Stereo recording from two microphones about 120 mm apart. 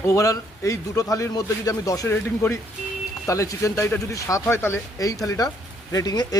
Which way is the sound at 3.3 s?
25° left (ahead or behind).